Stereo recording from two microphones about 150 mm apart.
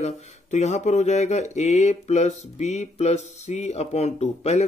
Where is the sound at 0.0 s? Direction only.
50° left (ahead or behind).